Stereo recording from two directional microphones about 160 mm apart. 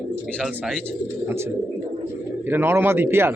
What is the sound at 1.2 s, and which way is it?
Speech, 15° right (ahead or behind).